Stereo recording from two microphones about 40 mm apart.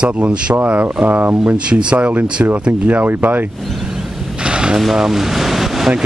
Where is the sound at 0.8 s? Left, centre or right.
Right.